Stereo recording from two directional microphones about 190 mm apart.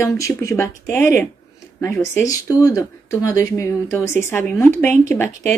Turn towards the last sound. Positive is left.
turn(degrees=5)  # may be behind; listen again after turning